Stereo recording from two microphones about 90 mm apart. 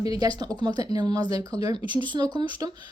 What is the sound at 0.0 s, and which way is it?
Speech, 45° right (ahead or behind).